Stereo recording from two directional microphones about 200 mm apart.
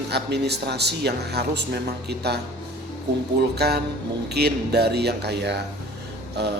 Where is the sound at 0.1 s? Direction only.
55° right (ahead or behind).